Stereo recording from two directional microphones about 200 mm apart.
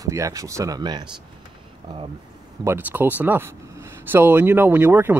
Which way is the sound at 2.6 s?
10° right (ahead or behind).